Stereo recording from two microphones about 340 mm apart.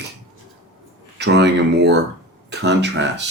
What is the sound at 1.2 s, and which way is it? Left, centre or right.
Speech, right.